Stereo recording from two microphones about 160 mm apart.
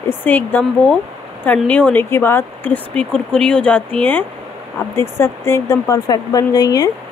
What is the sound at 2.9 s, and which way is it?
Speech, 5° left (ahead or behind).